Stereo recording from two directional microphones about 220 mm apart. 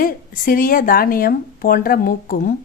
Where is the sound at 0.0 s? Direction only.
40° left (ahead or behind).